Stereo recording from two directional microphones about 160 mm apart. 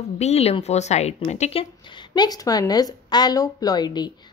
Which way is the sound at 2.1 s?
25° left (ahead or behind).